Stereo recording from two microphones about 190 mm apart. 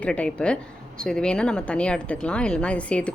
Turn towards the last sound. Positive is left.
turn(degrees=5)  # may be behind; listen again after turning